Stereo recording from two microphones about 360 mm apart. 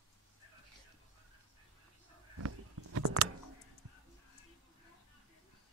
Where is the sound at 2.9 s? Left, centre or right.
Right.